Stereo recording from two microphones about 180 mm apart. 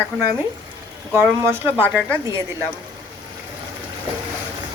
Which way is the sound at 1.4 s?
15° right (ahead or behind).